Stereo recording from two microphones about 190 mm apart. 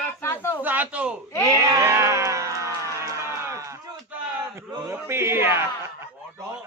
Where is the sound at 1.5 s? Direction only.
15° right (ahead or behind).